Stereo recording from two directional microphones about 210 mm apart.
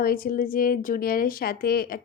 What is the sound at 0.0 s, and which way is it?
A woman's voice, 45° left (ahead or behind).